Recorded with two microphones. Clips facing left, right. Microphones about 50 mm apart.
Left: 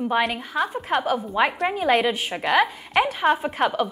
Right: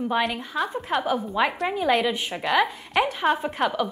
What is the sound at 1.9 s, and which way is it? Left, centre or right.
A woman's voice, centre.